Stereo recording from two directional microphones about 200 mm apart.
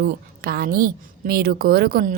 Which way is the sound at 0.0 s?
50° right (ahead or behind).